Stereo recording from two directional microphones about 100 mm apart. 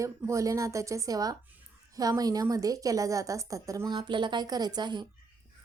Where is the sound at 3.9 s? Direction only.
50° right (ahead or behind).